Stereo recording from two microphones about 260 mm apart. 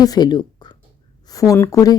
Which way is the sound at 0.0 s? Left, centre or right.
Centre.